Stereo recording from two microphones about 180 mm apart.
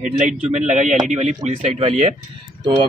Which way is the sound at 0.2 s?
40° right (ahead or behind).